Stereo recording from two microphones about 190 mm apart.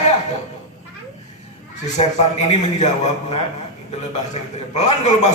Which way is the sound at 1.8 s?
35° left (ahead or behind).